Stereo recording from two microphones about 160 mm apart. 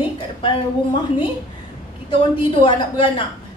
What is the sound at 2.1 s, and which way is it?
A woman's voice, 35° left (ahead or behind).